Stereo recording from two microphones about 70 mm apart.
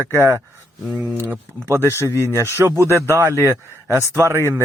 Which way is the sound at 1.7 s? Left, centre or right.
Right.